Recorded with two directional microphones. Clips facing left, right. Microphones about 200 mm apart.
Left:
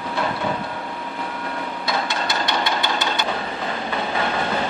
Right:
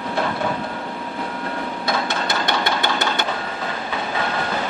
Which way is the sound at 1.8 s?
50° right (ahead or behind).